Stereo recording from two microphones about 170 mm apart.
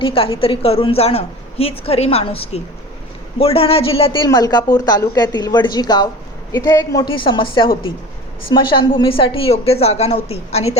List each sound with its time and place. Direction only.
0.0 s a woman's voice: 35° left (ahead or behind)